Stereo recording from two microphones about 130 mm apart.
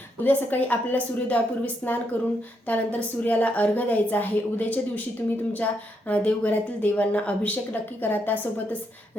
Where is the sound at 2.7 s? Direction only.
10° left (ahead or behind).